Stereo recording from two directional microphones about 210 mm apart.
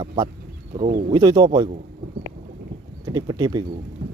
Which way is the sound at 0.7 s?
35° right (ahead or behind).